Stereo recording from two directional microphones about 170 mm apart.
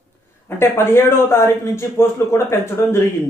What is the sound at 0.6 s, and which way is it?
Speech, 15° left (ahead or behind).